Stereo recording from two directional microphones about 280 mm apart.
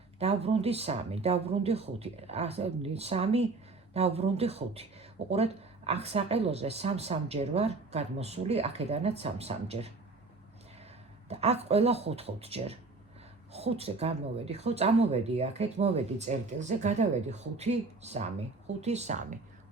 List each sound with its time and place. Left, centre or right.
0.2 s speech: right
11.3 s speech: right